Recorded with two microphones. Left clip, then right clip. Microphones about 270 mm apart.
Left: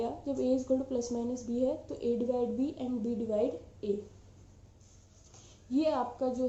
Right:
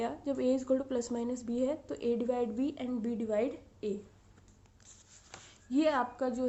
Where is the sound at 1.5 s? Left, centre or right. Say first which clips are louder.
Left 2 dB; right.